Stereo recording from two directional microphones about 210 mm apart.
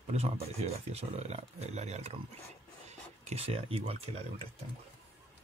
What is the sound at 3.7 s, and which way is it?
Speech, 30° right (ahead or behind).